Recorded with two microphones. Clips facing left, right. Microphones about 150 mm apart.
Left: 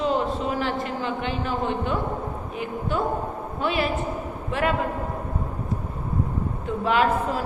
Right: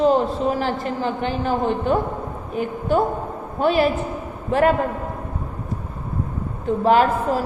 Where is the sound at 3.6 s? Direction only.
40° right (ahead or behind).